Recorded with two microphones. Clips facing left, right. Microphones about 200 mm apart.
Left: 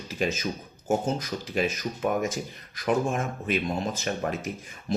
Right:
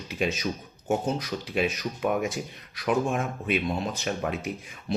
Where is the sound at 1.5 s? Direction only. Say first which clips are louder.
Even; centre (ahead or behind).